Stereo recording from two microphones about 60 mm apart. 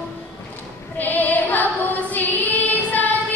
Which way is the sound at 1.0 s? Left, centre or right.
Left.